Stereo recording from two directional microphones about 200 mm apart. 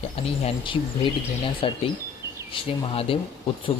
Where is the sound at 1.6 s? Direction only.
25° left (ahead or behind).